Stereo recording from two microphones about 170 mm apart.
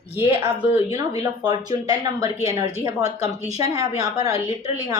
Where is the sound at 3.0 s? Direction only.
40° right (ahead or behind).